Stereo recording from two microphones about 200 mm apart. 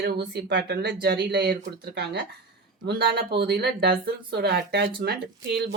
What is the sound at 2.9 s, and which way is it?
Speech, 50° right (ahead or behind).